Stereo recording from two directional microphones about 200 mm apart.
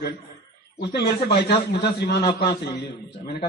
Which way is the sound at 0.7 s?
55° left (ahead or behind).